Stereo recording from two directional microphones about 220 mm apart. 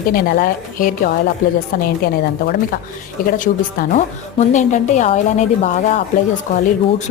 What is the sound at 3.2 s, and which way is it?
A woman's voice, 40° left (ahead or behind).